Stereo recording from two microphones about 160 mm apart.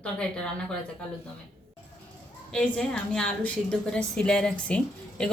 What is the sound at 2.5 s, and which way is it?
A woman's voice, 5° left (ahead or behind).